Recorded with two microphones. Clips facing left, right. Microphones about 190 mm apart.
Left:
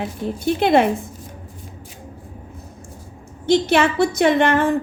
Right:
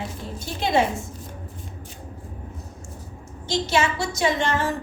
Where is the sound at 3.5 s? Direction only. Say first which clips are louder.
Left 7 dB; 60° left (ahead or behind).